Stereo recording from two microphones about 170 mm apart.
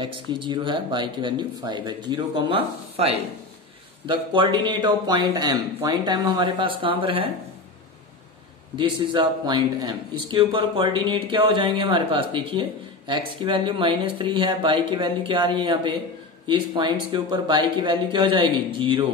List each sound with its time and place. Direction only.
0.0 s speech: 30° right (ahead or behind)
8.7 s speech: 25° right (ahead or behind)